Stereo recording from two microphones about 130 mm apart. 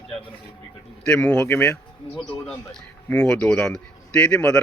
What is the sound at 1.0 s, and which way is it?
Speech, 10° left (ahead or behind).